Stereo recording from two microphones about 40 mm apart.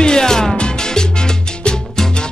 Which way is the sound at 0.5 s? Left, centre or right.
Centre.